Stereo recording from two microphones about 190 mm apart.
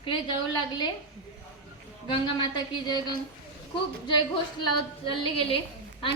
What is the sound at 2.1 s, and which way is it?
A woman's voice, 25° left (ahead or behind).